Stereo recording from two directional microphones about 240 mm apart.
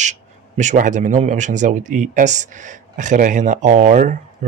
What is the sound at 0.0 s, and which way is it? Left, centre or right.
Speech, right.